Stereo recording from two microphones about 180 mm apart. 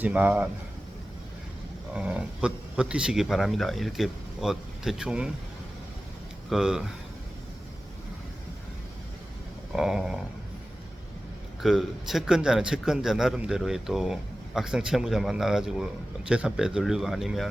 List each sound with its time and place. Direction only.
0.0 s a man's voice: 10° right (ahead or behind)
1.9 s a man's voice: 5° right (ahead or behind)
6.5 s a man's voice: centre (ahead or behind)
9.7 s a man's voice: 5° right (ahead or behind)
11.6 s a man's voice: centre (ahead or behind)